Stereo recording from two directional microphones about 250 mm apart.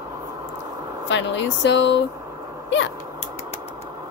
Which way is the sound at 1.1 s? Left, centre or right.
Left.